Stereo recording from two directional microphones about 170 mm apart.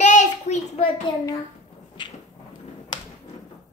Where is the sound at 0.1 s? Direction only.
45° left (ahead or behind); by 2.1 s 30° left (ahead or behind).